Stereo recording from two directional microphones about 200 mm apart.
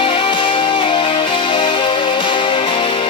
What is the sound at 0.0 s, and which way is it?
Music, 25° left (ahead or behind).